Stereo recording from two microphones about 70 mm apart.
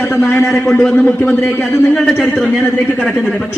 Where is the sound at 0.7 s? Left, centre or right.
Centre.